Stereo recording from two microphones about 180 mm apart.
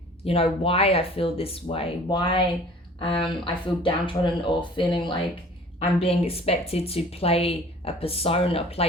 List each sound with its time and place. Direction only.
0.3 s speech: 30° left (ahead or behind)